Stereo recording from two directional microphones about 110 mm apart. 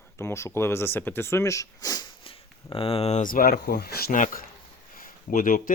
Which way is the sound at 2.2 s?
55° left (ahead or behind).